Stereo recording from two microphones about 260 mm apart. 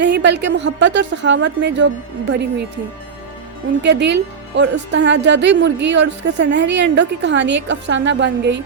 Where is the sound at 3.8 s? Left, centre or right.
Right.